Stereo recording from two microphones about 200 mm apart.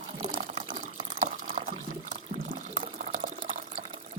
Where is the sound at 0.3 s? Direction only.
30° right (ahead or behind).